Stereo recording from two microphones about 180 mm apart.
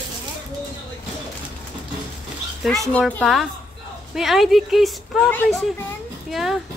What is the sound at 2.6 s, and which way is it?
Speech, centre (ahead or behind).